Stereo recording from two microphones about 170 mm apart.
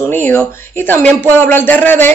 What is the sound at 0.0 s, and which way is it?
Speech, 15° left (ahead or behind).